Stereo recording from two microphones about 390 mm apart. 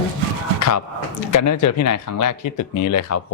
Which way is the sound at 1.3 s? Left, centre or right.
Left.